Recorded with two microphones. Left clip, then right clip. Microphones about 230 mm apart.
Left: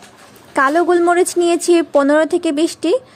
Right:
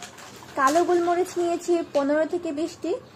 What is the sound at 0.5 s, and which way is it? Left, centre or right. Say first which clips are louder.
A woman's voice: left 7 dB; left.